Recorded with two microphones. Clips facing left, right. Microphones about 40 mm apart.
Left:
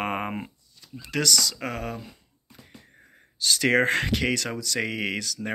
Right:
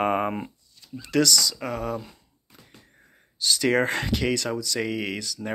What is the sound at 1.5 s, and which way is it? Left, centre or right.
Speech, left.